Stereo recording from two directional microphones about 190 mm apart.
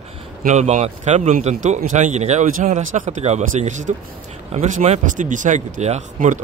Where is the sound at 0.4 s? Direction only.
40° right (ahead or behind).